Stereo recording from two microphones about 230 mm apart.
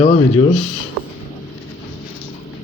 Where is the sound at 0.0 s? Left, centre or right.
Centre.